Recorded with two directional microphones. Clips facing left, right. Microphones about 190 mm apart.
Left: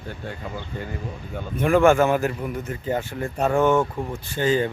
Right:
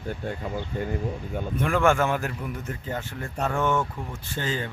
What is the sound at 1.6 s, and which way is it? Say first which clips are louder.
A man's voice: left 6 dB; 5° left (ahead or behind).